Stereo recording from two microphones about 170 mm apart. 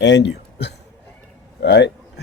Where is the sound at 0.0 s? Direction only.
90° left.